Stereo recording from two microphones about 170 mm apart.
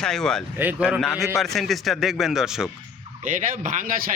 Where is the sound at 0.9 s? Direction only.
Centre (ahead or behind).